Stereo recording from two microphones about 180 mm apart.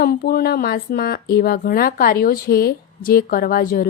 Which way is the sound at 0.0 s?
60° left (ahead or behind).